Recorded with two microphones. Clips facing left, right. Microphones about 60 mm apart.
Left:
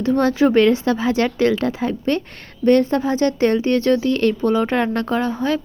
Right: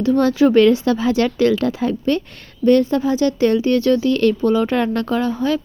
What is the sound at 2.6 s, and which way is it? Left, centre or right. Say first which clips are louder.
Speech: right 1 dB; left.